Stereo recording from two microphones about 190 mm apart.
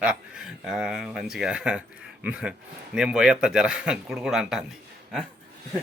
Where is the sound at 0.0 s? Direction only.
5° right (ahead or behind).